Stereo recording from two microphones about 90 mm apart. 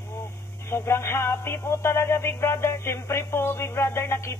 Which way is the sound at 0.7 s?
30° left (ahead or behind).